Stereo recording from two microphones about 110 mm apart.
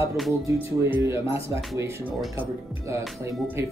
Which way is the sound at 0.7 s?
20° right (ahead or behind).